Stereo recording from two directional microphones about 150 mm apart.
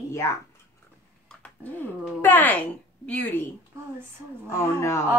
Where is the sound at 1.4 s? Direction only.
10° left (ahead or behind).